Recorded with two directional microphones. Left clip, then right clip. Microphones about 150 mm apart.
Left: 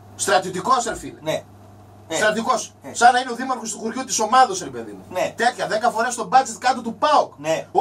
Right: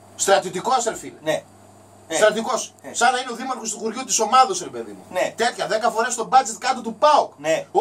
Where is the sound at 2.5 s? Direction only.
35° right (ahead or behind).